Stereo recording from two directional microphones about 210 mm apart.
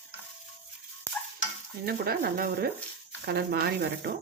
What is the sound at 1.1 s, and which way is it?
Stir, 10° left (ahead or behind).